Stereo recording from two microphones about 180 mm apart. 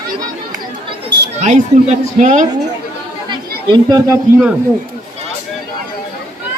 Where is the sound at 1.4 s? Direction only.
40° right (ahead or behind).